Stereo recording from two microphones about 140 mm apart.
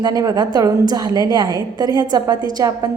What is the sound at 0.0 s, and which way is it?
A woman's voice, 25° right (ahead or behind).